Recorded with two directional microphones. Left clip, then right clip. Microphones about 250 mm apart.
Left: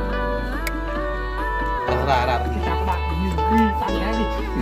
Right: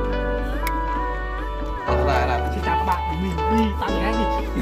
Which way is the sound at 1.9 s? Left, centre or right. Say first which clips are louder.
Even; left.